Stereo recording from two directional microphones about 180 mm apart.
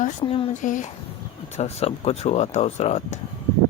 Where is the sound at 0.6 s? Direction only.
45° left (ahead or behind).